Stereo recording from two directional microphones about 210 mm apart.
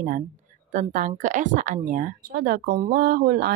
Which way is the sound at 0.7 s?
40° right (ahead or behind).